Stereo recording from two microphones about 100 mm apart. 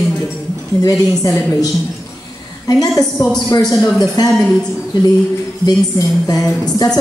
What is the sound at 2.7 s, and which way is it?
Speech, 40° left (ahead or behind).